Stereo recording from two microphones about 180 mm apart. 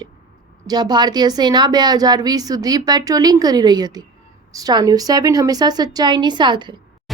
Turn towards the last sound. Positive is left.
turn(degrees=-25)  # may be behind; listen again after turning